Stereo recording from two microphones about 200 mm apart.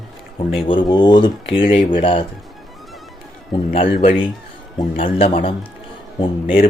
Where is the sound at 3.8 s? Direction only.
55° left (ahead or behind).